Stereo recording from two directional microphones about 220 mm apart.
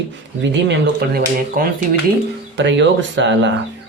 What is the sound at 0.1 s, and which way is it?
Speech, 55° right (ahead or behind).